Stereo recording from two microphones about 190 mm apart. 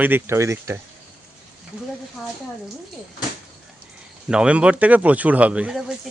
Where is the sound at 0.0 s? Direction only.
10° right (ahead or behind).